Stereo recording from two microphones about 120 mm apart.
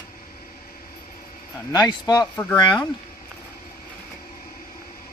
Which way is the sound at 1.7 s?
35° left (ahead or behind).